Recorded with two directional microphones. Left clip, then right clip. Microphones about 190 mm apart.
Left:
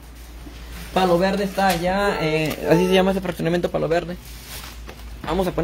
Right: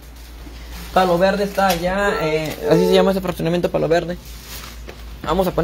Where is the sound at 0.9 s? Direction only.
20° left (ahead or behind).